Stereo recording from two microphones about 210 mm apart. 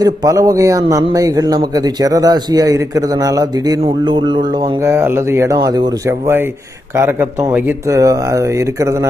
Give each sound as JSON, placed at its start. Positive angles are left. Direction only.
{"t": 0.0, "sound": "a man's voice", "side_deg": -15}